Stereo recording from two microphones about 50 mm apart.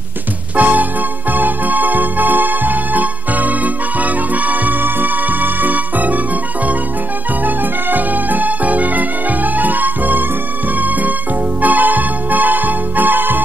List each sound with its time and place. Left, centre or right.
0.6 s music: right